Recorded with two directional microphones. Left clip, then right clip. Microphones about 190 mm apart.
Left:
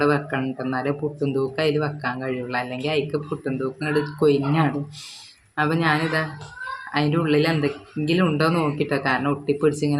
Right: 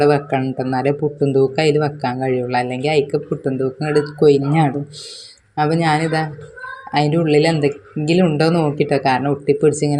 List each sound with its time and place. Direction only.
0.0 s speech: 20° right (ahead or behind)